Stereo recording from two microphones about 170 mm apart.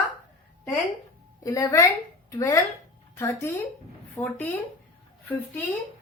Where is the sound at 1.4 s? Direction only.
20° left (ahead or behind).